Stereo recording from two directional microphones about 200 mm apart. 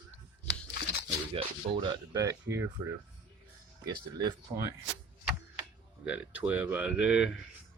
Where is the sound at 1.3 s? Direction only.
30° right (ahead or behind).